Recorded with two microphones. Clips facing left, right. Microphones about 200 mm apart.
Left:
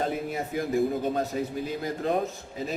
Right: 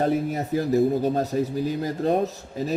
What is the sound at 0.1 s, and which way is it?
A man's voice, 40° right (ahead or behind).